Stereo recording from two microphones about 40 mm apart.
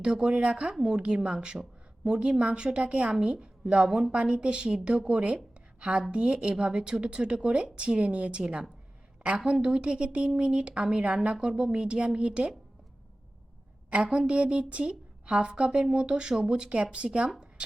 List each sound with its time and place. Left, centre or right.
0.0 s a woman's voice: right
13.9 s a woman's voice: right